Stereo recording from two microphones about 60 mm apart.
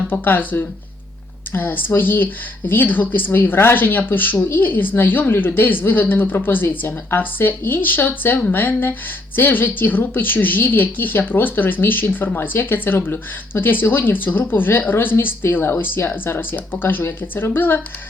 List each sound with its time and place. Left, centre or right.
0.1 s speech: left